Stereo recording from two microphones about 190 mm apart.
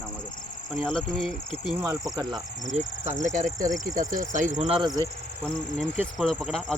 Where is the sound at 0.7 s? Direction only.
Centre (ahead or behind).